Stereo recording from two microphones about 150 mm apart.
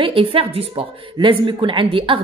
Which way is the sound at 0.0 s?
35° right (ahead or behind).